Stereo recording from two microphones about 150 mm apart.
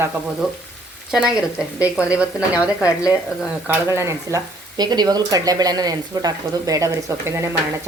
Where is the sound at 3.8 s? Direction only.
20° right (ahead or behind).